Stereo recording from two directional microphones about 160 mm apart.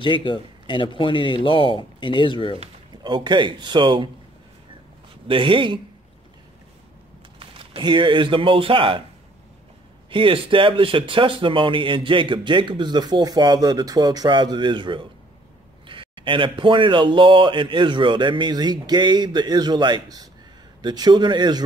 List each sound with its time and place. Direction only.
0.0 s speech: 30° left (ahead or behind)
2.5 s speech: 30° right (ahead or behind)
5.3 s speech: 30° right (ahead or behind)
7.3 s speech: 35° right (ahead or behind)
10.0 s speech: 35° right (ahead or behind)